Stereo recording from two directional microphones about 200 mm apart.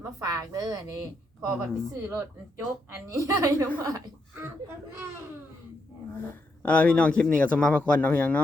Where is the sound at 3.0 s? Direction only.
15° right (ahead or behind).